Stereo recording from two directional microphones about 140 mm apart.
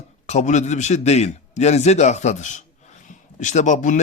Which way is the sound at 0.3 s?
55° left (ahead or behind).